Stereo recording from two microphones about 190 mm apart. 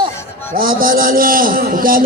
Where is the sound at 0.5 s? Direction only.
50° right (ahead or behind).